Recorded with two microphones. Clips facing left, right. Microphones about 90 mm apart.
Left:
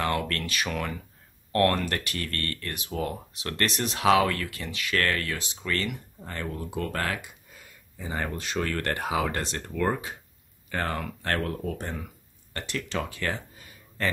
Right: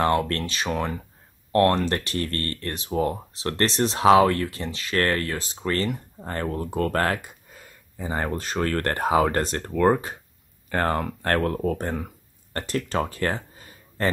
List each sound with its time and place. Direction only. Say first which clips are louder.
0.0 s speech: right 6 dB; 30° right (ahead or behind)